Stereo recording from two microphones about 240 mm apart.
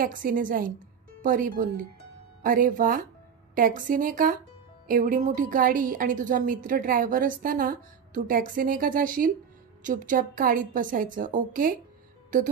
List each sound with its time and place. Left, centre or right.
0.0 s a woman's voice: right